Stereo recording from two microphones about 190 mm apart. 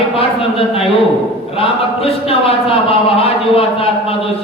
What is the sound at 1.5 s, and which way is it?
A man's voice, 30° left (ahead or behind).